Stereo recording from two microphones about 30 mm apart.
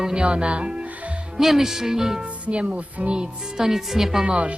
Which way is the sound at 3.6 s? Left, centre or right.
Centre.